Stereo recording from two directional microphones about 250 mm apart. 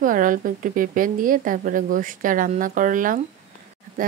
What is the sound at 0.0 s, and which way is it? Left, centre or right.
Speech, right.